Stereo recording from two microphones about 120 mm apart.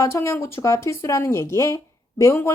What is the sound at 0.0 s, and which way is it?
Speech, 25° left (ahead or behind).